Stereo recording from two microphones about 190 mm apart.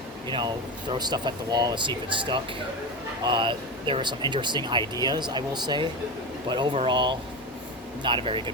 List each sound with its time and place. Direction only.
0.3 s speech: 25° right (ahead or behind)